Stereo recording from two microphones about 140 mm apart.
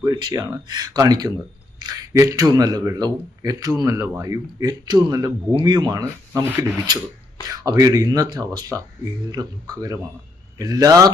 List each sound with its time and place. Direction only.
0.0 s speech: 30° right (ahead or behind)